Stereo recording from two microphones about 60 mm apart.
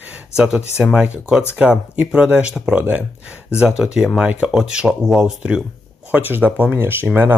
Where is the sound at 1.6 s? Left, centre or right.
Centre.